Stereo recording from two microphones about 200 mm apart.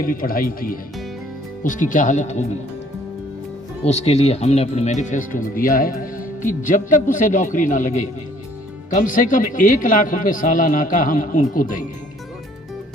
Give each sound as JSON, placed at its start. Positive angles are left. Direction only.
{"t": 0.0, "sound": "speech", "side_deg": 45}
{"t": 3.8, "sound": "speech", "side_deg": 30}